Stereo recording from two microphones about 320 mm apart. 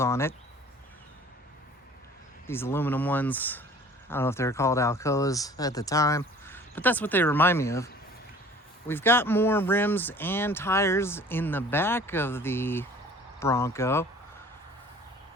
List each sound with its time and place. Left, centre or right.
0.0 s speech: centre
2.5 s speech: centre
8.9 s speech: centre